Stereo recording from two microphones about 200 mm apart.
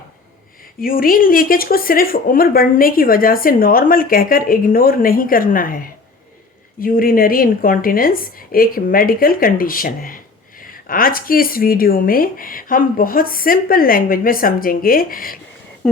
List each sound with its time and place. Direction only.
0.8 s speech: 45° left (ahead or behind)